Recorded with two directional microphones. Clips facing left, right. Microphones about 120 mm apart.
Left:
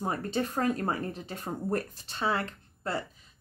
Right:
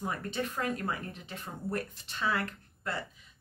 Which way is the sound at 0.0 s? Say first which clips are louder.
Left 4 dB; 35° left (ahead or behind).